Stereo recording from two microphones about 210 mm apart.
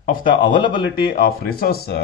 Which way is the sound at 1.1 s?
45° left (ahead or behind).